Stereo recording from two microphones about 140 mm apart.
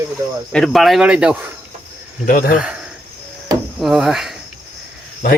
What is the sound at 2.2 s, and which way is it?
Speech, 90° left.